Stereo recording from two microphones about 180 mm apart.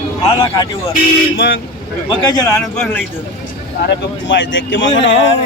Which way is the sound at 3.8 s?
85° left.